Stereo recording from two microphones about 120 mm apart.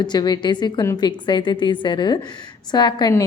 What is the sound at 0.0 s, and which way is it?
A woman's voice, 35° left (ahead or behind).